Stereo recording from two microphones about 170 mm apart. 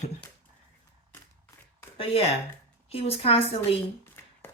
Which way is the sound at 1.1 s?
15° left (ahead or behind).